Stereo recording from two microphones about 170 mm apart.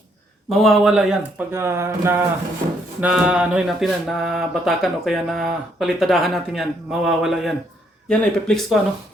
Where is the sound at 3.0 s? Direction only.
5° right (ahead or behind).